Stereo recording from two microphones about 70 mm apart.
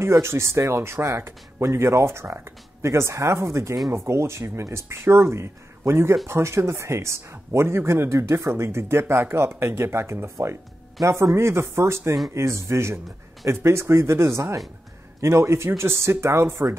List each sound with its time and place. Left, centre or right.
0.0 s speech: right